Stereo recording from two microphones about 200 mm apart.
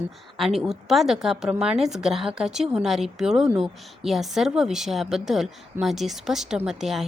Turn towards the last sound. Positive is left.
turn(degrees=0)  # may be behind; listen again after turning